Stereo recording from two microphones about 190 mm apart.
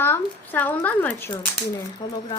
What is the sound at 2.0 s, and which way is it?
Speech, 25° left (ahead or behind).